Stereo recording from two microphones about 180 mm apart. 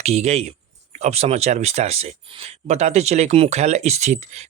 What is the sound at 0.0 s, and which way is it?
Speech, 35° right (ahead or behind).